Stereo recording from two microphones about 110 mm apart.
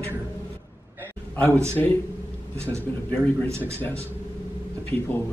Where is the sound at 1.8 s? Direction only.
15° left (ahead or behind).